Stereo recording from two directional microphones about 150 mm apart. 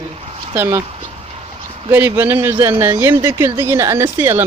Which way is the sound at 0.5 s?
15° right (ahead or behind).